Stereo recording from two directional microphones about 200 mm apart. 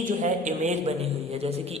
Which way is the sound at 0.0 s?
40° right (ahead or behind).